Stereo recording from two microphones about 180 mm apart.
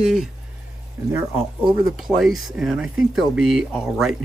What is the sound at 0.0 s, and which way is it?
Speech, centre (ahead or behind).